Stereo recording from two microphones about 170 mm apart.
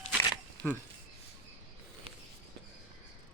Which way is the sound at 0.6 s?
20° right (ahead or behind).